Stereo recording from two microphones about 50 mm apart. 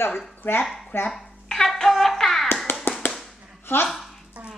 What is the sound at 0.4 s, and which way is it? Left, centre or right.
Speech, left.